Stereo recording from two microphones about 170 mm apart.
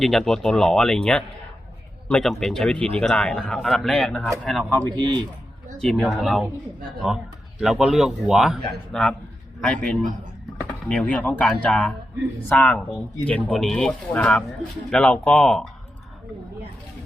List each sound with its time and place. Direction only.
0.0 s speech: centre (ahead or behind)
4.9 s a man's voice: 25° right (ahead or behind)
5.8 s speech: centre (ahead or behind)
7.6 s speech: centre (ahead or behind)